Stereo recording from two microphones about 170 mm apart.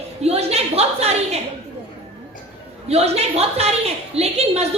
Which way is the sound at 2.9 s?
40° right (ahead or behind).